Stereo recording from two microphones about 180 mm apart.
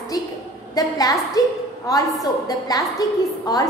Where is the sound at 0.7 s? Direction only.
20° left (ahead or behind).